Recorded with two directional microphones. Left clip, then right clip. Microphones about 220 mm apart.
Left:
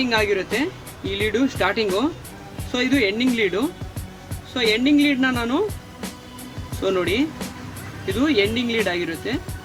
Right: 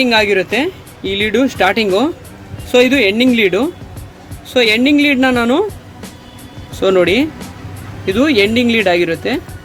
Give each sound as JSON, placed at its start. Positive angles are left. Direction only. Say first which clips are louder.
{"t": 0.0, "sound": "speech", "louder": "right 8 dB", "side_deg": -25}
{"t": 6.7, "sound": "speech", "louder": "right 10 dB", "side_deg": -30}